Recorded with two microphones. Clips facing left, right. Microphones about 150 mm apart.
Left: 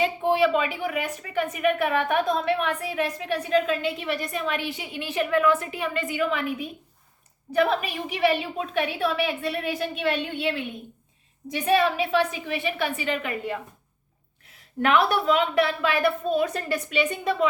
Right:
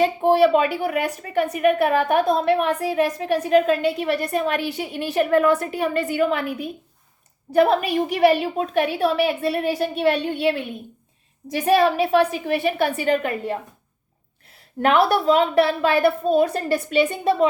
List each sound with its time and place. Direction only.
0.0 s a woman's voice: 40° right (ahead or behind)